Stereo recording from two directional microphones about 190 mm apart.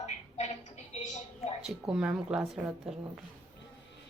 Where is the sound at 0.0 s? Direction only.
35° left (ahead or behind).